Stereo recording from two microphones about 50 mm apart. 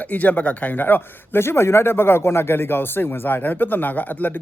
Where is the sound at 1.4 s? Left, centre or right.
Left.